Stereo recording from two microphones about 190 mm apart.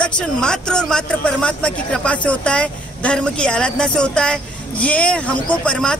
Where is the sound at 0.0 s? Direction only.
5° left (ahead or behind).